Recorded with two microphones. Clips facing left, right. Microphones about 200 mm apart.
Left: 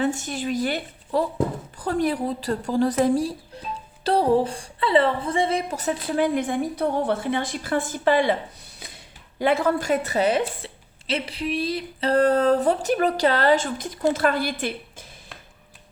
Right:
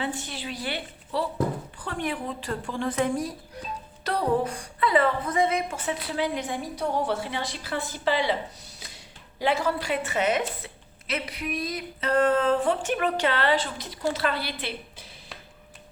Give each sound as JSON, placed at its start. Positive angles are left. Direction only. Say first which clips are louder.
{"t": 0.0, "sound": "a woman's voice", "louder": "left 7 dB", "side_deg": 45}
{"t": 9.4, "sound": "a woman's voice", "louder": "left 4 dB", "side_deg": 55}